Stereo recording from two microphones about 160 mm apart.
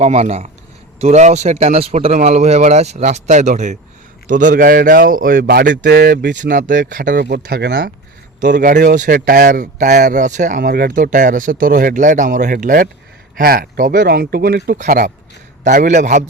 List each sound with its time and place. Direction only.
0.0 s speech: 45° right (ahead or behind); by 6.3 s 75° right (ahead or behind)
6.3 s speech: 55° right (ahead or behind)
7.2 s speech: 90° right; by 7.9 s 70° right (ahead or behind)
8.7 s speech: 55° right (ahead or behind)
10.6 s speech: 65° right (ahead or behind)
14.8 s speech: 55° right (ahead or behind)